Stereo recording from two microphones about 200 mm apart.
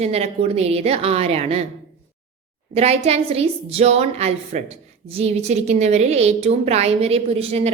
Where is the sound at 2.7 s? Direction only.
30° right (ahead or behind).